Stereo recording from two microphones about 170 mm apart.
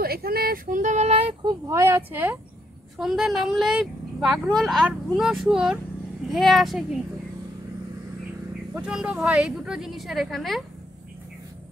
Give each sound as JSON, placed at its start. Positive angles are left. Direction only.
{"t": 0.0, "sound": "a sound", "side_deg": -65}
{"t": 3.0, "sound": "speech", "side_deg": 0}
{"t": 8.7, "sound": "speech", "side_deg": -5}